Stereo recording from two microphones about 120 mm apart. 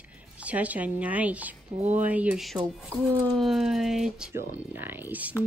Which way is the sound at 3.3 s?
Centre (ahead or behind).